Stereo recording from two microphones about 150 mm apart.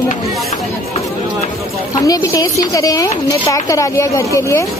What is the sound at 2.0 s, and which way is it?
A woman's voice, 25° left (ahead or behind).